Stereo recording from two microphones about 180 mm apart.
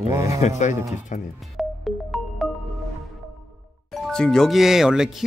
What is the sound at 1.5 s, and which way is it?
Music, centre (ahead or behind).